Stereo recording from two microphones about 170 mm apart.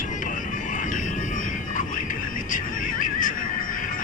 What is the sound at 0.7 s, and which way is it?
Vehicle, 50° left (ahead or behind).